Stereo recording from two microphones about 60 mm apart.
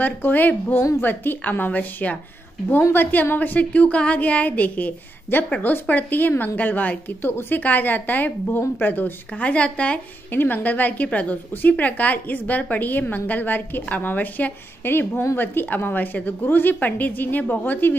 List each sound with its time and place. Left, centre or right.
0.0 s a woman's voice: left
10.3 s a woman's voice: left